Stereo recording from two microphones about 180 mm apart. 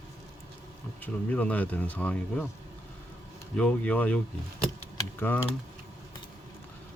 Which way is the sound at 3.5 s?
5° left (ahead or behind).